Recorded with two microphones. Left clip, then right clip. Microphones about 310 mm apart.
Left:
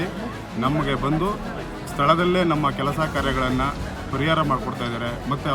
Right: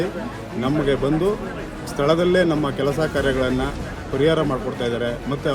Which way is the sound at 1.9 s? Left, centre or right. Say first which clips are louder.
Right 1 dB; centre.